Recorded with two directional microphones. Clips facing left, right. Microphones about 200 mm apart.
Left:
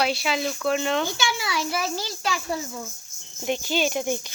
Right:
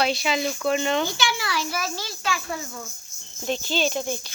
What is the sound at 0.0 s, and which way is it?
Speech, 5° left (ahead or behind).